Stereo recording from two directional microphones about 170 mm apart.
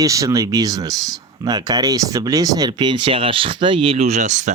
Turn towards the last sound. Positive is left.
turn(degrees=-45)  # may be behind; listen again after turning